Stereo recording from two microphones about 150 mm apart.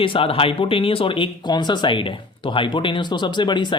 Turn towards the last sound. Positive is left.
turn(degrees=30)  # may be behind; listen again after turning